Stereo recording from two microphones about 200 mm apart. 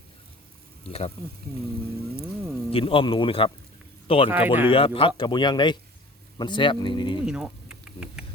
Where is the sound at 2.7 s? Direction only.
25° left (ahead or behind).